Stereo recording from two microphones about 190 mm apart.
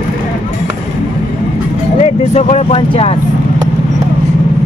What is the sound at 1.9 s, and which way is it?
Speech, 35° left (ahead or behind).